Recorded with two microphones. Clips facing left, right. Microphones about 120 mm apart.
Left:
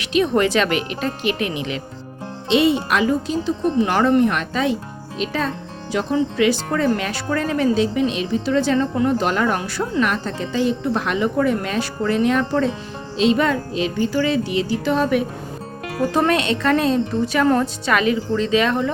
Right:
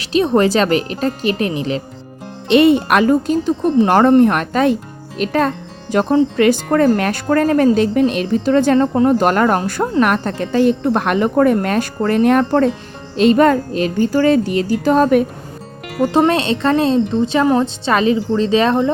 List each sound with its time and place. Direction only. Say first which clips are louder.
0.0 s a woman's voice: right 4 dB; 35° right (ahead or behind)
2.5 s a woman's voice: right 6 dB; 55° right (ahead or behind)
16.1 s a woman's voice: right 4 dB; 30° right (ahead or behind)